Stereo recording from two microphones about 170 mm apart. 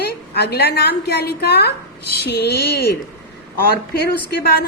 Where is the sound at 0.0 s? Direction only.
70° left (ahead or behind).